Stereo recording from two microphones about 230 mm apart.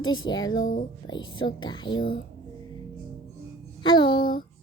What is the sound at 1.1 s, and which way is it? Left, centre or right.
Speech, centre.